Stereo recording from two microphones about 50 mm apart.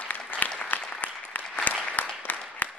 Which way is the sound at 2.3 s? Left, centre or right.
Left.